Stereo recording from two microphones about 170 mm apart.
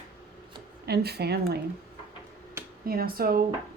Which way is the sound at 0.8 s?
70° right (ahead or behind).